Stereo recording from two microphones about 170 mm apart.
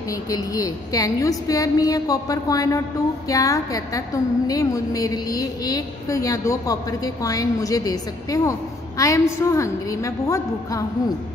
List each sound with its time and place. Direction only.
0.1 s a woman's voice: 20° left (ahead or behind)